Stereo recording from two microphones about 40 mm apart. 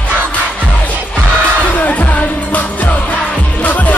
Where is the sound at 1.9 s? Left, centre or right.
Left.